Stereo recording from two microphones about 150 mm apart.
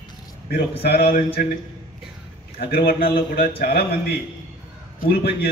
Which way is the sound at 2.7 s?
85° left.